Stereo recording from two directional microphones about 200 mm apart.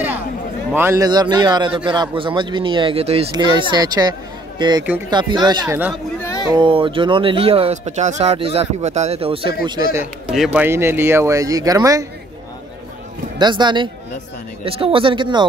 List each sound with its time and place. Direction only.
0.7 s speech: 15° right (ahead or behind)
6.2 s a sound: 15° left (ahead or behind)
6.5 s speech: 25° right (ahead or behind)
10.3 s speech: 5° right (ahead or behind)
13.4 s speech: 20° right (ahead or behind)